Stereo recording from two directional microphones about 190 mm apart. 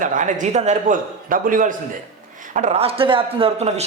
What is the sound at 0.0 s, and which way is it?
A man's voice, 45° right (ahead or behind).